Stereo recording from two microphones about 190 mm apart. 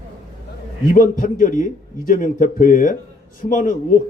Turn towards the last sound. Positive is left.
turn(degrees=45)  # may be behind; listen again after turning